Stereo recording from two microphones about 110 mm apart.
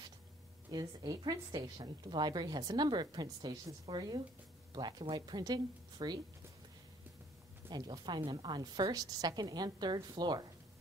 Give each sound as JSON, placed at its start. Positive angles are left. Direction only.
{"t": 0.7, "sound": "a woman's voice", "side_deg": -40}
{"t": 7.7, "sound": "a woman's voice", "side_deg": -40}